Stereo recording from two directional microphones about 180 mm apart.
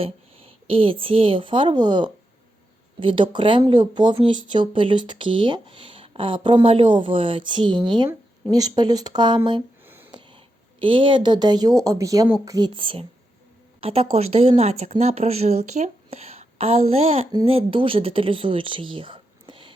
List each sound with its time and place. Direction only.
0.0 s speech: 30° right (ahead or behind)
9.8 s a sound: 10° right (ahead or behind)
10.8 s speech: 30° right (ahead or behind)